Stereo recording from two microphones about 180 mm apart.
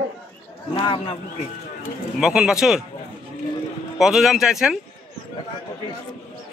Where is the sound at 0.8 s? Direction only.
25° left (ahead or behind).